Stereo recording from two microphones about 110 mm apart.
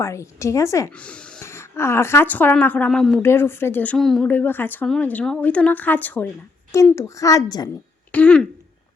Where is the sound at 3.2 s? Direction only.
20° left (ahead or behind).